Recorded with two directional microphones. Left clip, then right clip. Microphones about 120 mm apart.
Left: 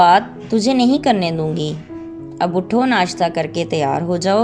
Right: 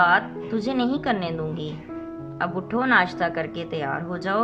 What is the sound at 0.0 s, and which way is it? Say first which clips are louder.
Speech: left 8 dB; 30° left (ahead or behind).